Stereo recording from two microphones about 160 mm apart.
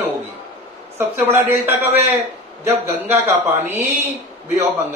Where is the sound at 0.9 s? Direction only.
15° right (ahead or behind).